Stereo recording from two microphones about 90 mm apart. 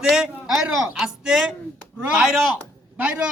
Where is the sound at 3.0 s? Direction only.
20° right (ahead or behind).